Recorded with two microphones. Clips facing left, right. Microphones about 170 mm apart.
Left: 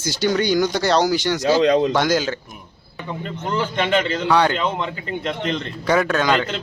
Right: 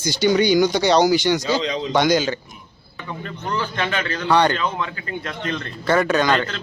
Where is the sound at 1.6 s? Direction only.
55° left (ahead or behind).